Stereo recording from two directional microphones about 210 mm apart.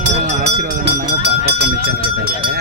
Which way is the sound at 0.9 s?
50° right (ahead or behind).